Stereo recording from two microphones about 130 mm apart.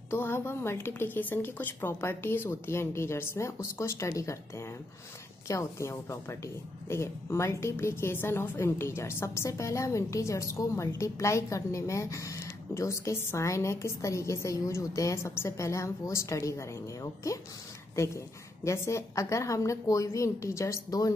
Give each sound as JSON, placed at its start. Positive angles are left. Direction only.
{"t": 0.1, "sound": "a woman's voice", "side_deg": 20}